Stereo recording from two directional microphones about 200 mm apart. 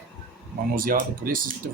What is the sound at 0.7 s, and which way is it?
Speech, 45° right (ahead or behind).